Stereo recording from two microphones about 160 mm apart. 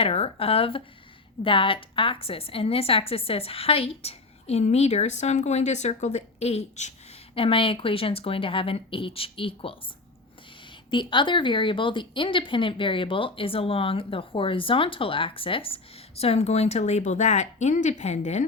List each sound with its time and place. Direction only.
0.0 s a woman's voice: 40° left (ahead or behind)
10.9 s a woman's voice: 30° left (ahead or behind); by 18.4 s 45° left (ahead or behind)